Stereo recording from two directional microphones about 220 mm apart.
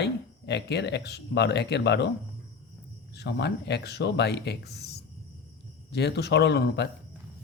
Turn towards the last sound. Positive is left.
turn(degrees=50)  # may be behind; listen again after turning